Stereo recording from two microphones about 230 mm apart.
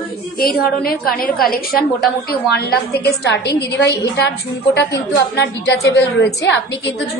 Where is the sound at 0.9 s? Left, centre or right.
Left.